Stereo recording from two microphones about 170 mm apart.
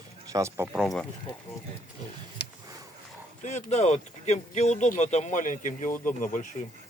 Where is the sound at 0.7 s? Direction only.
Centre (ahead or behind).